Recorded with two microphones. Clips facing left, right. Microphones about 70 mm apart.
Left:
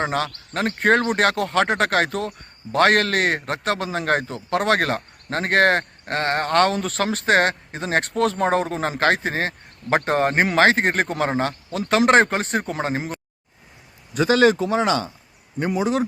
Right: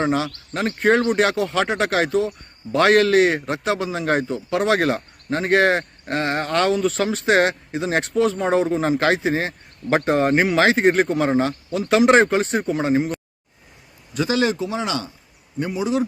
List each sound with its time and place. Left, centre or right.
0.0 s speech: left
14.1 s speech: left